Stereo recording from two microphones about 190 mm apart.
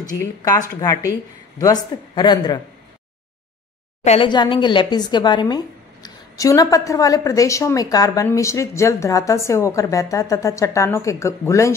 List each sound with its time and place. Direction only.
0.0 s a woman's voice: 20° left (ahead or behind)
4.0 s a woman's voice: 35° left (ahead or behind)
4.3 s a woman's voice: 25° left (ahead or behind)